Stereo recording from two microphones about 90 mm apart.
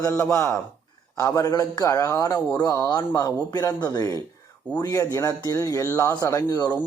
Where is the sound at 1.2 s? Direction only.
45° left (ahead or behind).